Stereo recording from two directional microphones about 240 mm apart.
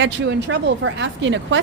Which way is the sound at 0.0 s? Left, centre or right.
Right.